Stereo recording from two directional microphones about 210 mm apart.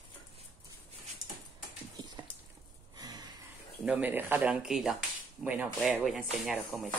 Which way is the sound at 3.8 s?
5° right (ahead or behind).